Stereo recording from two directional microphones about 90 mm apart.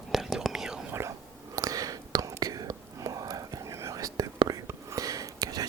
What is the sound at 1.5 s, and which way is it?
Whispering, 40° right (ahead or behind).